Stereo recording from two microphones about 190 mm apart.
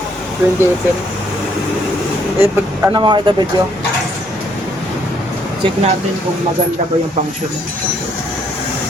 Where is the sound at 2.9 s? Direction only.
25° right (ahead or behind).